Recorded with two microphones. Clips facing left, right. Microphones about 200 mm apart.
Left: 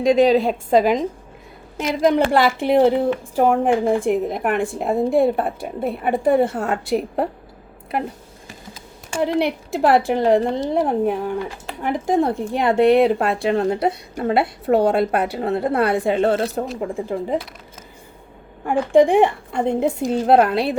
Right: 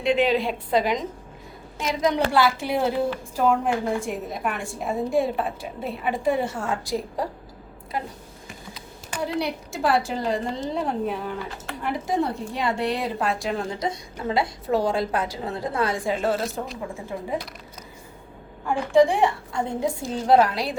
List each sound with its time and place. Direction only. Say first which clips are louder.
0.0 s a woman's voice: left 7 dB; 40° left (ahead or behind); by 7.3 s 65° left (ahead or behind)
9.2 s speech: left 7 dB; 60° left (ahead or behind)
18.6 s speech: left 4 dB; 55° left (ahead or behind)